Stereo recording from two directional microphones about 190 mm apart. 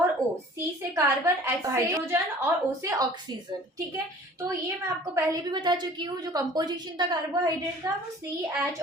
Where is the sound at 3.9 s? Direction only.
15° right (ahead or behind).